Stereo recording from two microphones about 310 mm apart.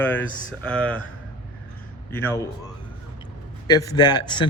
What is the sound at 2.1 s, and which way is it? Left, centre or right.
Speech, centre.